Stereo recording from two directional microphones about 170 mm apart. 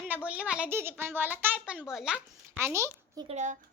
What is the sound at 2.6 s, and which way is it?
Speech, 15° right (ahead or behind).